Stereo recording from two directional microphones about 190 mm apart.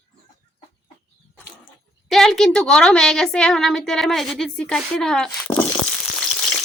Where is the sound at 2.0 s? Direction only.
Centre (ahead or behind).